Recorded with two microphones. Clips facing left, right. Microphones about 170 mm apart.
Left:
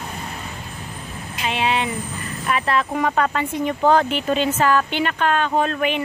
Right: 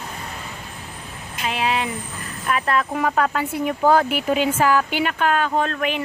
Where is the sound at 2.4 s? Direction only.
Centre (ahead or behind).